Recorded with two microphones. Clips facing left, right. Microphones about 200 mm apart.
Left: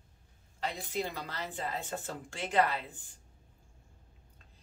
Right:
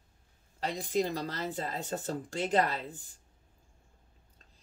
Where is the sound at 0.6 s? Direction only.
40° right (ahead or behind).